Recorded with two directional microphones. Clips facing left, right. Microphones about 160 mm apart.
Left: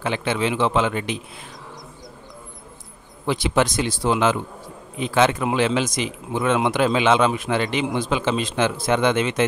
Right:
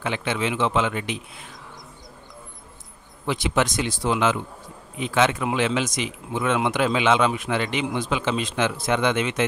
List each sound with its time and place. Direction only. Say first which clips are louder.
0.0 s speech: left 3 dB; 35° left (ahead or behind)
3.3 s speech: left 3 dB; 35° left (ahead or behind)